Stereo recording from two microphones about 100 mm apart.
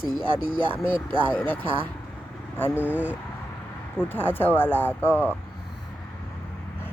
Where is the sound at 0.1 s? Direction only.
5° right (ahead or behind).